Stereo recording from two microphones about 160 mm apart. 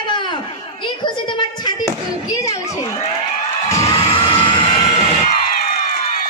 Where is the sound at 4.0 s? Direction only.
35° left (ahead or behind).